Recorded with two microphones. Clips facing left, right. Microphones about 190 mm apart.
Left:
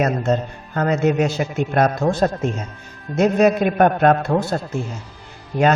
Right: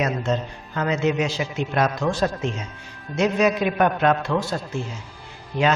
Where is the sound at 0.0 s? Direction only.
50° left (ahead or behind).